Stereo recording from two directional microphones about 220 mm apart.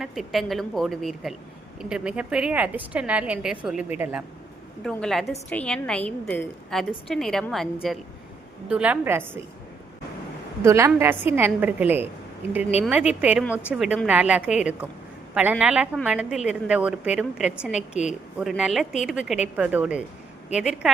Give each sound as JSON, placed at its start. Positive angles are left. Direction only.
{"t": 0.0, "sound": "a woman's voice", "side_deg": 0}
{"t": 4.8, "sound": "a woman's voice", "side_deg": 5}
{"t": 8.7, "sound": "a woman's voice", "side_deg": -5}
{"t": 10.6, "sound": "a woman's voice", "side_deg": -15}
{"t": 13.4, "sound": "a woman's voice", "side_deg": 10}
{"t": 13.7, "sound": "a woman's voice", "side_deg": -5}
{"t": 17.7, "sound": "a woman's voice", "side_deg": 30}
{"t": 18.3, "sound": "a woman's voice", "side_deg": -5}